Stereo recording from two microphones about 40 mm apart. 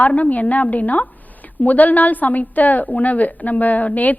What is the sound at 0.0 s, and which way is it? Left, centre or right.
A woman's voice, left.